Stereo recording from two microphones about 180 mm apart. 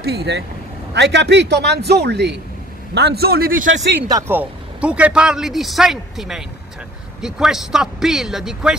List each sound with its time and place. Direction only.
0.0 s a man's voice: 65° right (ahead or behind)
4.1 s speech: 10° right (ahead or behind)